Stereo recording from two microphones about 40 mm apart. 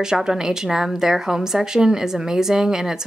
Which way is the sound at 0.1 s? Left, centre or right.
Centre.